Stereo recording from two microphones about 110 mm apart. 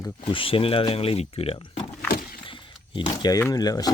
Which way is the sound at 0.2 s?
50° left (ahead or behind).